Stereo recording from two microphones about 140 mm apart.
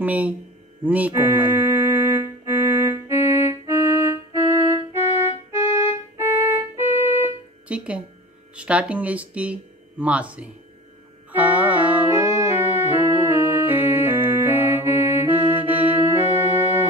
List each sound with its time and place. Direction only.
0.0 s speech: 10° right (ahead or behind)
0.8 s music: 10° right (ahead or behind)
8.5 s speech: 10° right (ahead or behind)
11.3 s music: 10° right (ahead or behind)